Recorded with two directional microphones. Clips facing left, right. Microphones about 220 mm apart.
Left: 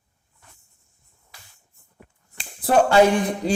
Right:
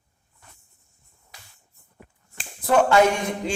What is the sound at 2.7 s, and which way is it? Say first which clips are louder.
Speech: left 2 dB; 30° left (ahead or behind).